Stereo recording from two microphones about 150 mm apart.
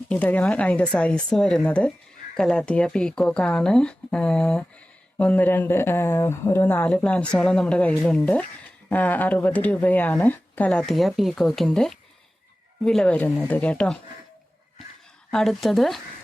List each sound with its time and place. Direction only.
0.1 s speech: 10° left (ahead or behind)
15.3 s a woman's voice: centre (ahead or behind)